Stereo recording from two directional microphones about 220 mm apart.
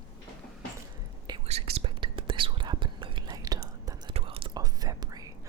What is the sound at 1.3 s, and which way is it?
Whispering, 30° right (ahead or behind).